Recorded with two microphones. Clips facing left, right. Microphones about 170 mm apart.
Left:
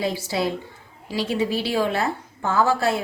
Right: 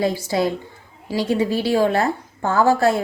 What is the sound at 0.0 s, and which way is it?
A woman's voice, 45° right (ahead or behind).